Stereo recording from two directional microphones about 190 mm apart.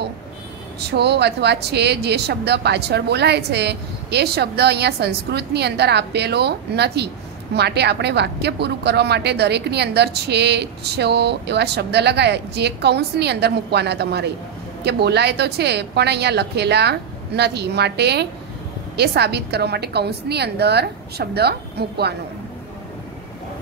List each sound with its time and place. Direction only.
0.7 s a woman's voice: 60° right (ahead or behind)